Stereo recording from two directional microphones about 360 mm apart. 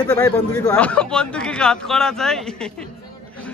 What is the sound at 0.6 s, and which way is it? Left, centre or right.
Speech, centre.